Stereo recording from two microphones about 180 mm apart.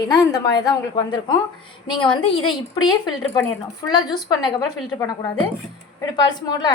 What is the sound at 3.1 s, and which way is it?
Speech, centre (ahead or behind).